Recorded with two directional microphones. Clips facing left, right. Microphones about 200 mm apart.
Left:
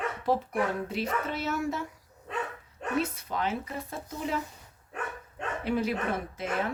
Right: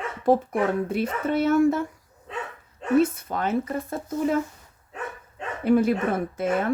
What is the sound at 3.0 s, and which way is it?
Speech, 50° right (ahead or behind).